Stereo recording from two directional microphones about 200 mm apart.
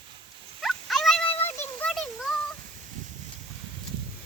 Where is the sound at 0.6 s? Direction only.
Centre (ahead or behind).